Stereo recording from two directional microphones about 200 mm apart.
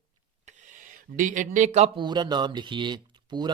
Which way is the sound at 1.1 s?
40° right (ahead or behind).